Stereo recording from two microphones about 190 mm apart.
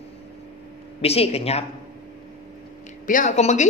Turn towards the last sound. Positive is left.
turn(degrees=35)  # may be behind; listen again after turning